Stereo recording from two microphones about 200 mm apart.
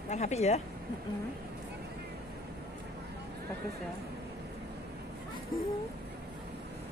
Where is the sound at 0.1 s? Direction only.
35° left (ahead or behind).